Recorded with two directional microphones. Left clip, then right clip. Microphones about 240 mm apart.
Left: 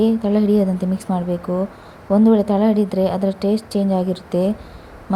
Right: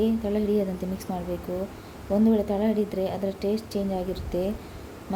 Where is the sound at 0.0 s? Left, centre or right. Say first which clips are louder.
Left 8 dB; centre.